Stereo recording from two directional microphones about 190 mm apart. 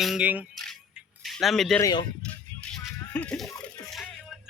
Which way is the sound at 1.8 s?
20° left (ahead or behind).